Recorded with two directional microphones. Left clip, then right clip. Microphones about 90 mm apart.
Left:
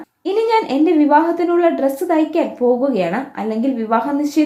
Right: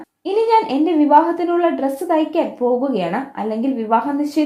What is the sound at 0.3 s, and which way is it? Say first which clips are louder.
A woman's voice: right 1 dB; 35° right (ahead or behind).